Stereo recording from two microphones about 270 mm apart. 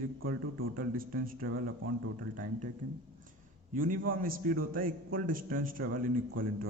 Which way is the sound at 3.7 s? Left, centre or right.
Right.